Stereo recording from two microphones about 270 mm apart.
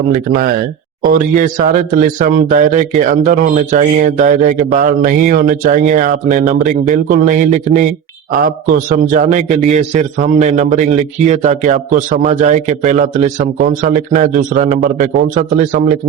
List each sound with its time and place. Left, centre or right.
0.1 s a man's voice: right